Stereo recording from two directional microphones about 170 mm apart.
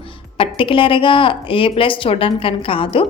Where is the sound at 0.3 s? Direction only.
30° left (ahead or behind).